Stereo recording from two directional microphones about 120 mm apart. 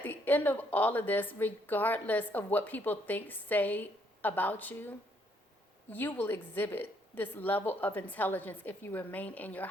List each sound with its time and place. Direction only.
0.0 s a woman's voice: 15° left (ahead or behind)